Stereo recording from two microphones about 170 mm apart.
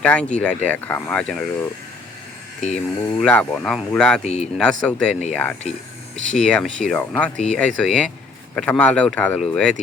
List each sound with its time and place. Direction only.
0.0 s speech: 5° left (ahead or behind)
2.7 s speech: 5° left (ahead or behind)
4.2 s speech: 40° left (ahead or behind)
4.5 s speech: 5° left (ahead or behind)